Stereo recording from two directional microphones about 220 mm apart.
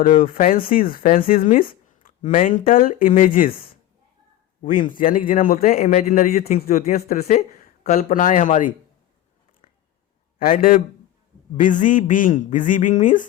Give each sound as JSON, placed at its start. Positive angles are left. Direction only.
{"t": 0.0, "sound": "a man's voice", "side_deg": 40}
{"t": 4.6, "sound": "a man's voice", "side_deg": 40}
{"t": 10.3, "sound": "a man's voice", "side_deg": 40}